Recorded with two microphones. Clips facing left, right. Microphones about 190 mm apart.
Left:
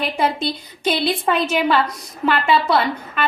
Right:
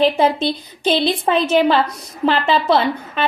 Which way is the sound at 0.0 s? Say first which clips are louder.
Right 6 dB; 25° right (ahead or behind).